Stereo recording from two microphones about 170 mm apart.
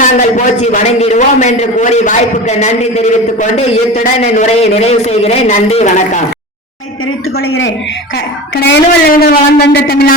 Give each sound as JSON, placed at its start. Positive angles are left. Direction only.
{"t": 0.0, "sound": "a man's voice", "side_deg": 45}
{"t": 8.5, "sound": "a woman's voice", "side_deg": 80}